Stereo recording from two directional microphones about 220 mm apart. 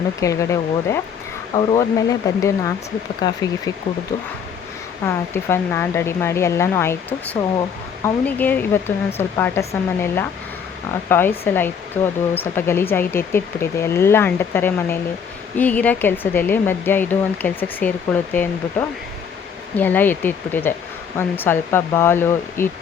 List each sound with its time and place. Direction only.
0.2 s speech: 15° left (ahead or behind)
4.1 s speech: 20° left (ahead or behind)
8.0 s speech: 5° left (ahead or behind)